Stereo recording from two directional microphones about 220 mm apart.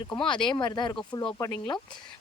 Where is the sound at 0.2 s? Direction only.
20° left (ahead or behind).